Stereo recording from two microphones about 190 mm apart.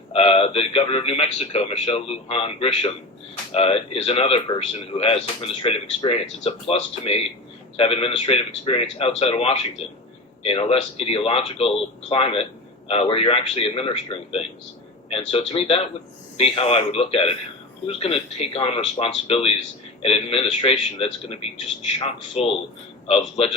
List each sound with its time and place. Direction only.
0.1 s a man's voice: 30° left (ahead or behind)